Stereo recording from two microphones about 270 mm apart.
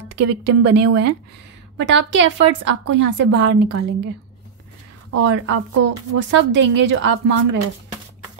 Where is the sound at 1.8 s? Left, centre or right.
Right.